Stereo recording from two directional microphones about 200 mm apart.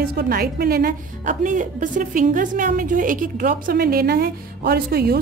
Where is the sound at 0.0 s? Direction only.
50° right (ahead or behind).